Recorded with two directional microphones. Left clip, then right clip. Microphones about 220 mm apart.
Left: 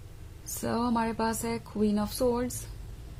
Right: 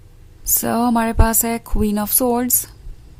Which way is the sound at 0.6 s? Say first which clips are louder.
Right 11 dB; 40° right (ahead or behind).